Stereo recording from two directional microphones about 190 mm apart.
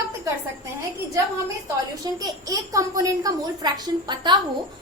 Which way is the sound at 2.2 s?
20° right (ahead or behind).